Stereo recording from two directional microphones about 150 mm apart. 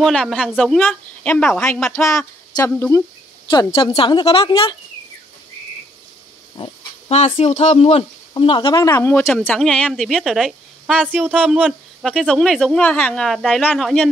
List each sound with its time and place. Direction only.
0.0 s a woman's voice: 5° left (ahead or behind)
1.9 s speech: 20° left (ahead or behind)
3.4 s speech: 35° left (ahead or behind)
6.5 s speech: 40° left (ahead or behind)
8.9 s speech: 15° left (ahead or behind)
9.6 s a woman's voice: centre (ahead or behind)
11.4 s speech: 5° right (ahead or behind)
12.1 s a woman's voice: 5° left (ahead or behind)